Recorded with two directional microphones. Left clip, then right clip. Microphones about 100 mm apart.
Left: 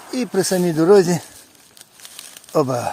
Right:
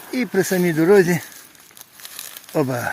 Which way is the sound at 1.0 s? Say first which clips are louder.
Left 1 dB; 25° left (ahead or behind).